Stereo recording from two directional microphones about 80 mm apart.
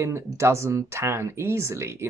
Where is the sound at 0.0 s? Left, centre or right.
Right.